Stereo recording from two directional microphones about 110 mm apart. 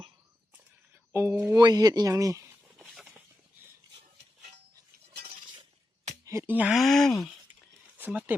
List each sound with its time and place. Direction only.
1.1 s speech: 25° right (ahead or behind)
1.5 s speech: 35° right (ahead or behind)
2.7 s a sound: 5° right (ahead or behind)
6.2 s a sound: 25° right (ahead or behind)
6.5 s speech: 15° right (ahead or behind)
6.7 s speech: centre (ahead or behind)
7.9 s speech: 15° right (ahead or behind)